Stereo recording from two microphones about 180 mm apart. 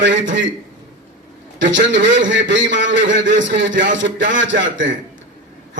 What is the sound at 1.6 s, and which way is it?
A man's voice, 90° right.